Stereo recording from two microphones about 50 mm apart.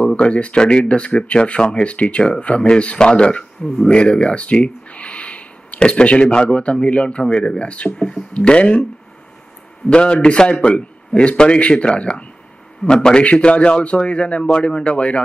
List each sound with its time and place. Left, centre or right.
0.0 s a man's voice: left
9.8 s a man's voice: centre